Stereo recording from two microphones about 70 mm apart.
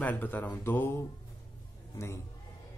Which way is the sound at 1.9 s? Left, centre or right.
Left.